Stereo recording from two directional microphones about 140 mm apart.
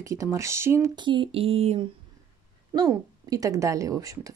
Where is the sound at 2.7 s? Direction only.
25° right (ahead or behind).